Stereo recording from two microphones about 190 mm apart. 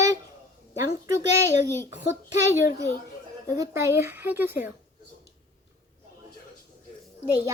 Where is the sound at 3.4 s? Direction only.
15° right (ahead or behind).